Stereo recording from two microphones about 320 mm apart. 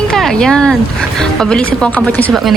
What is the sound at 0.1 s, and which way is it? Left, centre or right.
A woman's voice, centre.